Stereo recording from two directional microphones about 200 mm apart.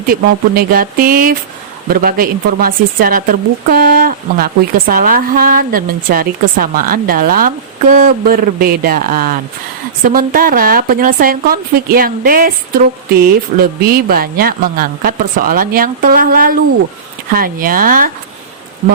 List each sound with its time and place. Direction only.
0.1 s a woman's voice: 45° right (ahead or behind)
13.6 s a woman's voice: 50° right (ahead or behind)